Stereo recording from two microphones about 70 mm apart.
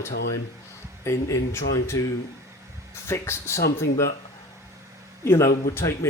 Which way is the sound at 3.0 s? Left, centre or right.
Left.